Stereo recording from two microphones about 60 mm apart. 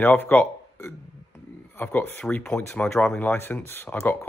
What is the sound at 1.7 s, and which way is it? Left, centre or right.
Speech, left.